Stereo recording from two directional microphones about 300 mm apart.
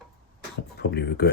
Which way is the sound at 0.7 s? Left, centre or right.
Left.